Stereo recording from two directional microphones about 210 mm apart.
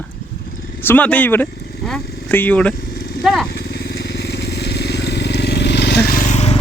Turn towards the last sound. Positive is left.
turn(degrees=30)  # may be behind; listen again after turning